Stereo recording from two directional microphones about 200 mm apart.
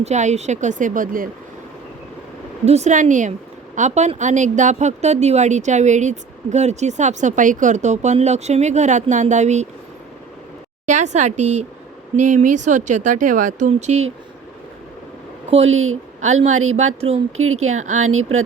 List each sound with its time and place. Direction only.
0.0 s speech: 35° right (ahead or behind)
2.6 s speech: 35° right (ahead or behind)
10.8 s speech: 35° right (ahead or behind)
15.6 s speech: 90° right
16.2 s speech: 35° right (ahead or behind)
17.3 s speech: 90° right
17.7 s speech: 35° right (ahead or behind)
18.0 s speech: 90° right